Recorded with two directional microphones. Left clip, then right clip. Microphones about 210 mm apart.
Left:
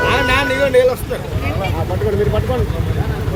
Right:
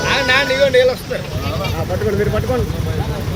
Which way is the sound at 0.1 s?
55° left (ahead or behind).